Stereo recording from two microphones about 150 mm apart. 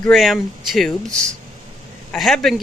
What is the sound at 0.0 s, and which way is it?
A man's voice, centre (ahead or behind).